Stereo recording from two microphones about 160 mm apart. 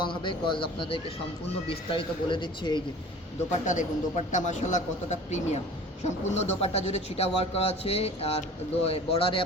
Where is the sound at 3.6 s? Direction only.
50° left (ahead or behind).